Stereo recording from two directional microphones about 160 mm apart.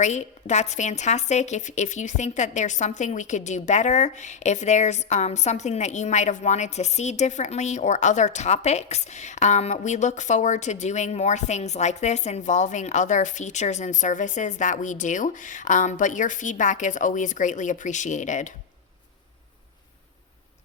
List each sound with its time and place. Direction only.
0.0 s a woman's voice: 45° left (ahead or behind)